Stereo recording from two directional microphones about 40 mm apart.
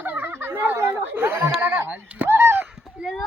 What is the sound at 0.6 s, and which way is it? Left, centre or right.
Chatter, right.